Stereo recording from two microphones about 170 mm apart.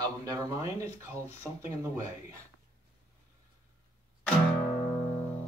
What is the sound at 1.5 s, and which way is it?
Speech, 5° left (ahead or behind).